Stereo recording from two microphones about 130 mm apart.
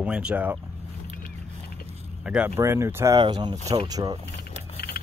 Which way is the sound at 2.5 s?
20° right (ahead or behind).